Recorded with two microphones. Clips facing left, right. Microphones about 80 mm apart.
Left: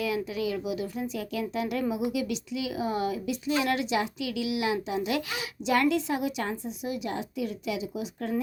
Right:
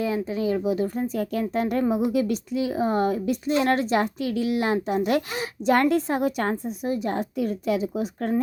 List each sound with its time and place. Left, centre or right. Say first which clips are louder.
0.0 s speech: right 4 dB; right